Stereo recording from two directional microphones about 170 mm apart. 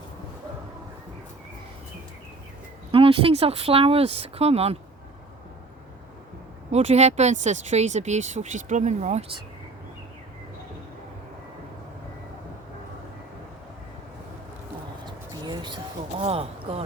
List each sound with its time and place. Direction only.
2.9 s speech: 30° right (ahead or behind)
6.7 s speech: 40° right (ahead or behind)
15.0 s a sound: 25° right (ahead or behind)